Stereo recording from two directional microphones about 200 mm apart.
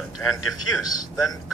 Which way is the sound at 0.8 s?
20° left (ahead or behind).